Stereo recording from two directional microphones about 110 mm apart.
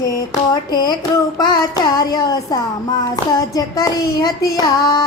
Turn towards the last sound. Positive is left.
turn(degrees=35)  # may be behind; listen again after turning